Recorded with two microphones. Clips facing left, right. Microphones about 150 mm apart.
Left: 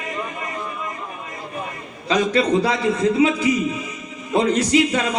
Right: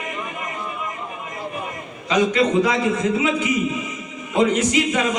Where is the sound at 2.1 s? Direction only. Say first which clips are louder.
Even; 35° left (ahead or behind).